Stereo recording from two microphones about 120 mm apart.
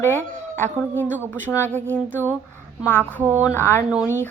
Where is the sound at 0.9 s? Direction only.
15° right (ahead or behind).